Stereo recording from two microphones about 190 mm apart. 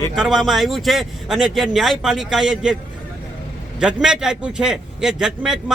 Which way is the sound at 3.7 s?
5° right (ahead or behind).